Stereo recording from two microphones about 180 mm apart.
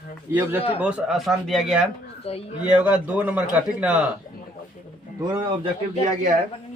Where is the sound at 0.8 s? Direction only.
5° right (ahead or behind).